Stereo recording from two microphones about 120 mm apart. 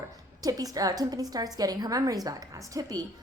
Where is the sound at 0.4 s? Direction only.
30° right (ahead or behind).